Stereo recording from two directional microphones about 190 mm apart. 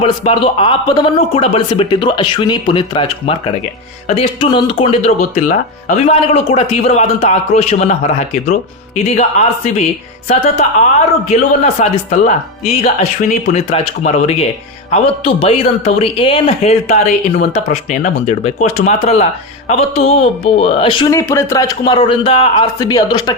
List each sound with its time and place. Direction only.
0.0 s speech: 30° left (ahead or behind)